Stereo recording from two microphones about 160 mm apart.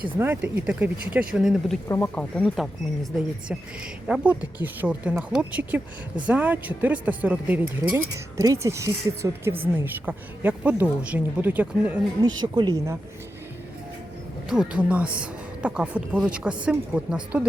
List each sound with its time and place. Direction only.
0.2 s speech: 10° right (ahead or behind)
1.9 s speech: 10° left (ahead or behind); by 11.9 s 10° right (ahead or behind)
12.2 s speech: 25° right (ahead or behind)
14.5 s speech: 5° right (ahead or behind)